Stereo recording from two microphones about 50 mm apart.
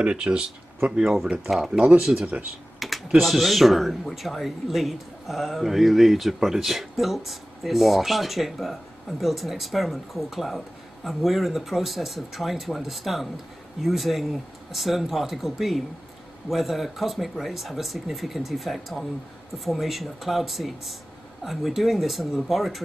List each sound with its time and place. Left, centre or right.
0.0 s speech: right
2.1 s speech: right
2.8 s speech: centre